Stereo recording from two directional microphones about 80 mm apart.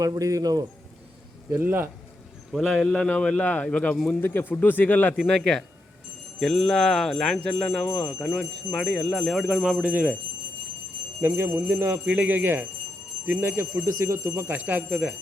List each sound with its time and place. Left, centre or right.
0.0 s speech: right
1.5 s speech: right
2.5 s speech: centre
2.8 s a man's voice: centre
4.2 s speech: left
5.1 s a man's voice: centre
11.2 s speech: right
12.0 s speech: centre